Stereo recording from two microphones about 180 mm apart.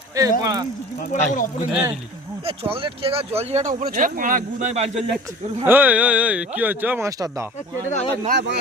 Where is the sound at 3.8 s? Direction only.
55° right (ahead or behind); by 5.1 s 40° right (ahead or behind).